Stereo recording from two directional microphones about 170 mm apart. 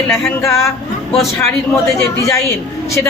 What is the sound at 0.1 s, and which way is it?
Speech, 15° left (ahead or behind).